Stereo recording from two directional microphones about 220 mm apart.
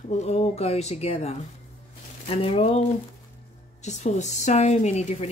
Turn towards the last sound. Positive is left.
turn(degrees=30)  # may be behind; listen again after turning